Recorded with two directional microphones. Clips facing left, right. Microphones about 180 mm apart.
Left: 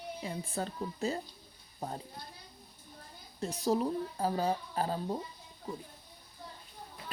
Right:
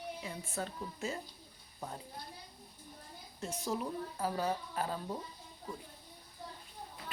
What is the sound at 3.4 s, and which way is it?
Speech, 35° left (ahead or behind).